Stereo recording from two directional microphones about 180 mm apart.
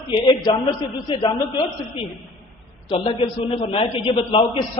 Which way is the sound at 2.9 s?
30° left (ahead or behind).